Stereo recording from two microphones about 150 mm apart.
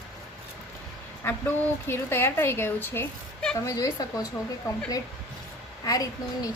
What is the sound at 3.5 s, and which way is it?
Speech, 20° left (ahead or behind).